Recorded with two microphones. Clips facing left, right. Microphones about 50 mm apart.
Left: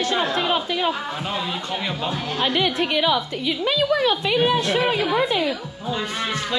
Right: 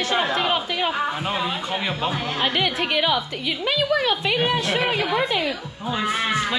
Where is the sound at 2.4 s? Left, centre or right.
Right.